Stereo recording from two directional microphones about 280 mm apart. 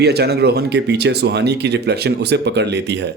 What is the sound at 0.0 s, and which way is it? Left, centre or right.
Speech, right.